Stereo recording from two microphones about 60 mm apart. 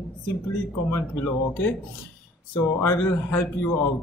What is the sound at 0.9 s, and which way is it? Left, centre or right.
Speech, left.